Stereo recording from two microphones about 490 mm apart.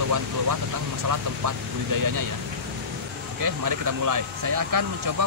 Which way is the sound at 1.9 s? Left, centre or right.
Right.